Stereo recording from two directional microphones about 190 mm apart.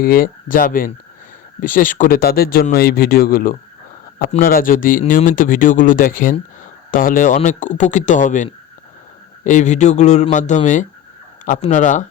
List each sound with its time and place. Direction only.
0.0 s speech: 50° left (ahead or behind)